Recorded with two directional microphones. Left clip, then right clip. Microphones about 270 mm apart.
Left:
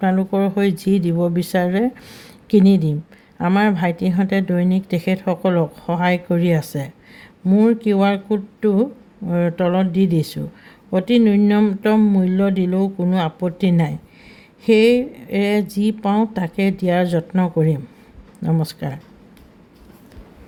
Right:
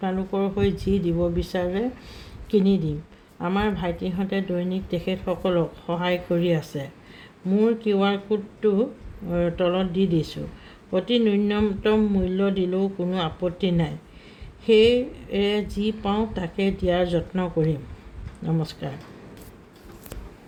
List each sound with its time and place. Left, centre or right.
0.0 s a woman's voice: left